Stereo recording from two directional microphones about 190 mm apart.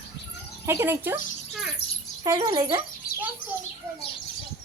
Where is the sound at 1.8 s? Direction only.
30° left (ahead or behind).